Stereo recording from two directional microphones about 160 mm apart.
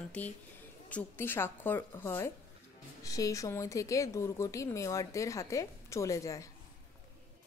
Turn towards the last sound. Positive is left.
turn(degrees=20)  # may be behind; listen again after turning